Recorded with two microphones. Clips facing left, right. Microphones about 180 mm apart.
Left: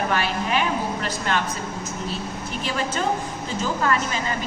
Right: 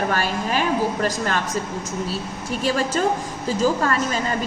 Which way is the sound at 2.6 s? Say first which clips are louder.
Right 4 dB; 40° right (ahead or behind).